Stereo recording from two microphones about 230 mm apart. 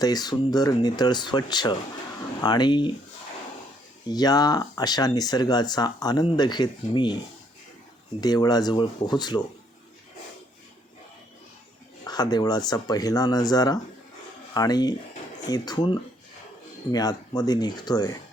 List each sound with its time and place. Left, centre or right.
0.0 s speech: centre
4.1 s speech: centre
8.2 s speech: centre
12.0 s speech: centre